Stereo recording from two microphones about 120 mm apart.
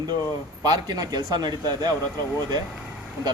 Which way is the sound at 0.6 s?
35° right (ahead or behind).